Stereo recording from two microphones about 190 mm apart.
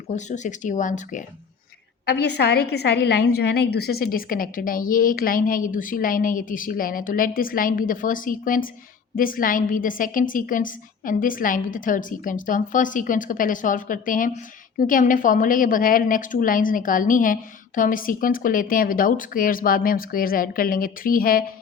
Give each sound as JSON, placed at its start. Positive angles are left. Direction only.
{"t": 0.1, "sound": "speech", "side_deg": 40}
{"t": 2.0, "sound": "a woman's voice", "side_deg": 60}